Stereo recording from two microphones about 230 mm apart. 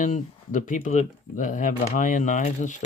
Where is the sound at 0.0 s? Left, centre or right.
Left.